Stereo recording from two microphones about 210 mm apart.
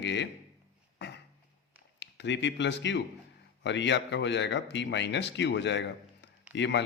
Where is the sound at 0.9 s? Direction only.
55° left (ahead or behind).